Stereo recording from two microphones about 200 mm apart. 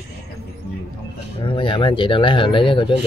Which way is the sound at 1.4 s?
25° left (ahead or behind).